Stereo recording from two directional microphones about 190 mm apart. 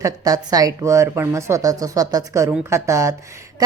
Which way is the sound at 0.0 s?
20° right (ahead or behind).